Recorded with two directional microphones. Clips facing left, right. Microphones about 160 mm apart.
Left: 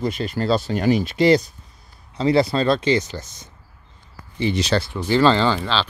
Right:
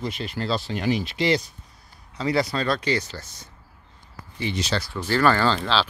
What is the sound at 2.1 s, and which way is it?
Speech, 25° left (ahead or behind).